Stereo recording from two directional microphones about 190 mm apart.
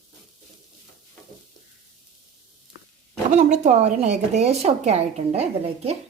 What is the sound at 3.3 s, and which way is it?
A woman's voice, 35° right (ahead or behind).